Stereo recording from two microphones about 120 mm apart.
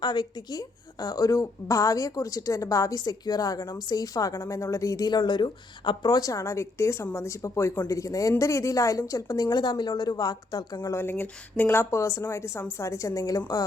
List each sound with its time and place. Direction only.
0.0 s a woman's voice: 35° left (ahead or behind)
10.8 s a woman's voice: 20° left (ahead or behind)